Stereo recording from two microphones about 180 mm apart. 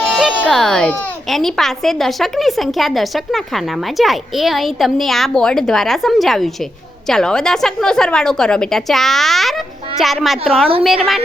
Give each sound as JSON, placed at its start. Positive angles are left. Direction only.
{"t": 0.3, "sound": "a woman's voice", "side_deg": 5}